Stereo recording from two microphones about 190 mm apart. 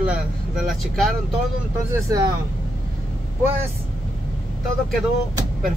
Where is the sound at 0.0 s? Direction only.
5° right (ahead or behind).